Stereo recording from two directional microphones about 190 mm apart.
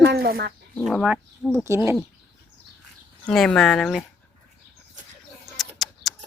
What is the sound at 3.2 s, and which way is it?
Speech, centre (ahead or behind).